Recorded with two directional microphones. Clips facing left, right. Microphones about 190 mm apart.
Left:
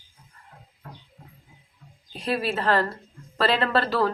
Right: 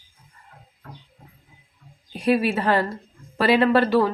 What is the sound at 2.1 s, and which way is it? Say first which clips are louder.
A woman's voice: right 6 dB; 15° right (ahead or behind).